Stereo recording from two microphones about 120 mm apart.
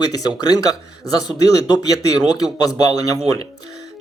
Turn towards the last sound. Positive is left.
turn(degrees=30)  # may be behind; listen again after turning